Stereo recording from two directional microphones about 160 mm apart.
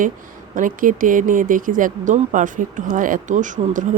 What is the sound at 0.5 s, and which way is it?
Speech, 55° right (ahead or behind).